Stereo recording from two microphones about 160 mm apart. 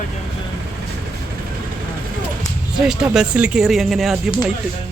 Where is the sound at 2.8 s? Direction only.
5° right (ahead or behind).